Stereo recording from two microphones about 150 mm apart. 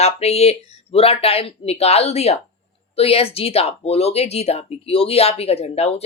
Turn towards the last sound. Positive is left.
turn(degrees=45)  # may be behind; listen again after turning